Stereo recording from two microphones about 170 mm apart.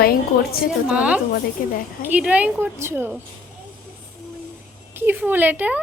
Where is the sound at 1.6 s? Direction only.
55° left (ahead or behind).